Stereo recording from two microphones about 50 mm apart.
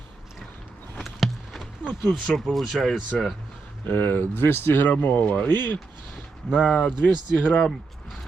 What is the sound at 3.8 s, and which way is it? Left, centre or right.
Speech, left.